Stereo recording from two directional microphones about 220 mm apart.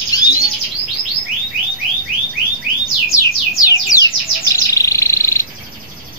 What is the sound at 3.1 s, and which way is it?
Bird, 15° left (ahead or behind).